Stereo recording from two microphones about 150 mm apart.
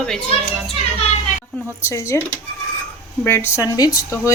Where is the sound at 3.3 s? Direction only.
15° left (ahead or behind).